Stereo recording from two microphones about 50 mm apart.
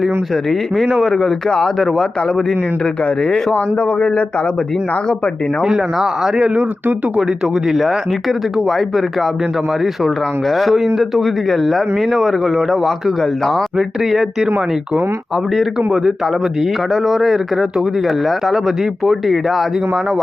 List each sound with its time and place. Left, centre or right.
0.5 s speech: centre
3.8 s speech: left
5.6 s speech: centre
6.3 s speech: right
7.2 s speech: centre
13.7 s speech: centre
15.9 s speech: centre